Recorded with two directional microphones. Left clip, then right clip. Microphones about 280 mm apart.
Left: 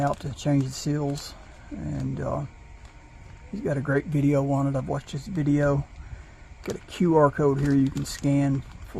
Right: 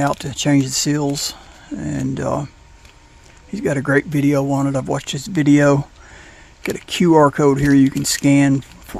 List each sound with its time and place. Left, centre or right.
0.0 s speech: right
3.5 s speech: right
6.7 s speech: right
7.1 s speech: right